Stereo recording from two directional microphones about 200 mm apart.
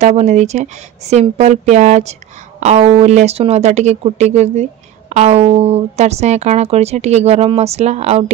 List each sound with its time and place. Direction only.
0.0 s speech: 35° right (ahead or behind)